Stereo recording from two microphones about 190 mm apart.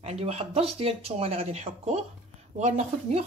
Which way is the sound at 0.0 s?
35° right (ahead or behind).